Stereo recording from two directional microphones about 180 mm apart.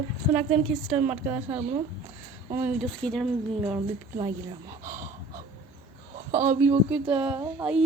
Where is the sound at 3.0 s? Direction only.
5° left (ahead or behind).